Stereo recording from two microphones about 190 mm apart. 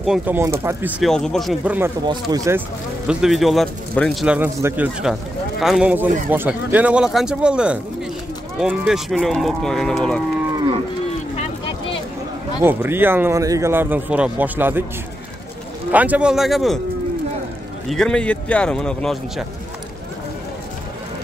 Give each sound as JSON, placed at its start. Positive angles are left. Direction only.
{"t": 0.0, "sound": "speech", "side_deg": -5}
{"t": 1.1, "sound": "speech", "side_deg": 5}
{"t": 2.0, "sound": "speech", "side_deg": -15}
{"t": 3.1, "sound": "speech", "side_deg": -5}
{"t": 12.6, "sound": "speech", "side_deg": -10}
{"t": 15.9, "sound": "speech", "side_deg": -10}
{"t": 17.8, "sound": "speech", "side_deg": 5}